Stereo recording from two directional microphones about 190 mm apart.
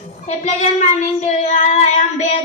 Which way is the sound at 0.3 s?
40° left (ahead or behind).